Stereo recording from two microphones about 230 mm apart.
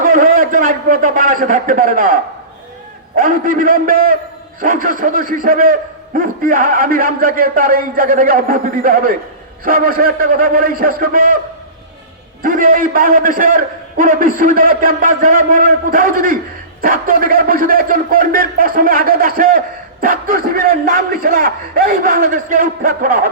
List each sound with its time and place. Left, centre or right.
0.0 s a man's voice: right
3.2 s a man's voice: right
12.4 s a man's voice: right